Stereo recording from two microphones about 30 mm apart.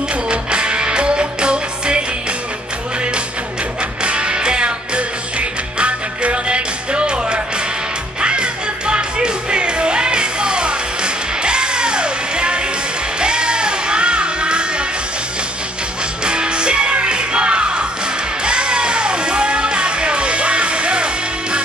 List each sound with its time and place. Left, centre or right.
0.3 s music: right
4.0 s music: right
16.3 s music: right